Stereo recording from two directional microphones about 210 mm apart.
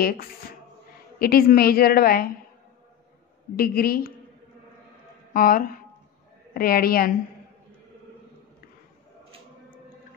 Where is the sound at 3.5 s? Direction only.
45° left (ahead or behind).